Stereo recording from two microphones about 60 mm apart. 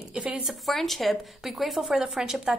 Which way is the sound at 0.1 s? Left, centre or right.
Centre.